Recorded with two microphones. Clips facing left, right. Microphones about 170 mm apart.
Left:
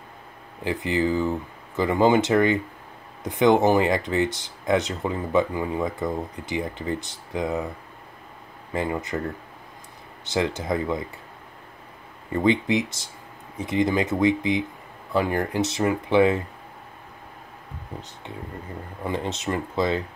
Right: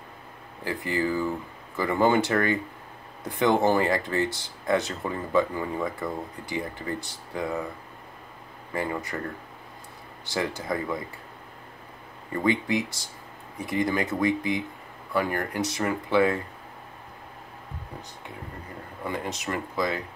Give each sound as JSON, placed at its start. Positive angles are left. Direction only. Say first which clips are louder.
{"t": 0.7, "sound": "speech", "louder": "left 4 dB", "side_deg": 20}
{"t": 8.7, "sound": "speech", "louder": "left 3 dB", "side_deg": 20}
{"t": 10.2, "sound": "speech", "louder": "left 4 dB", "side_deg": 20}
{"t": 12.4, "sound": "speech", "louder": "left 3 dB", "side_deg": 20}
{"t": 19.0, "sound": "speech", "louder": "left 4 dB", "side_deg": 25}